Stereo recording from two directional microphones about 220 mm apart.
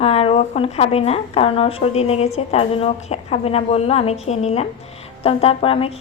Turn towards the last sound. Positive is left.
turn(degrees=25)  # may be behind; listen again after turning